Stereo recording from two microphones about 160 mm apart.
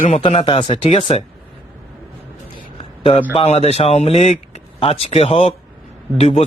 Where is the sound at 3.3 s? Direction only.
40° left (ahead or behind).